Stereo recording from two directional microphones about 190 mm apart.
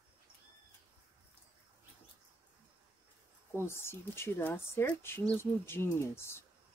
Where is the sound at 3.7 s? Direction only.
15° left (ahead or behind).